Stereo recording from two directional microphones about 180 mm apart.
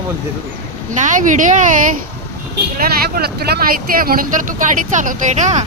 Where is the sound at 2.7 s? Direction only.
55° right (ahead or behind).